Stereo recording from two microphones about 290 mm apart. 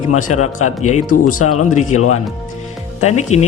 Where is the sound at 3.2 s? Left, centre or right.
Left.